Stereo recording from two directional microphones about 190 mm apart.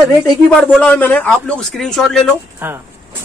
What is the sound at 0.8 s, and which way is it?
Speech, 10° left (ahead or behind).